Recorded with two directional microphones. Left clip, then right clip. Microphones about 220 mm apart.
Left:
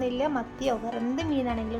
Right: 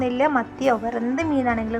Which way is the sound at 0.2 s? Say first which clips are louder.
Right 8 dB; 20° right (ahead or behind).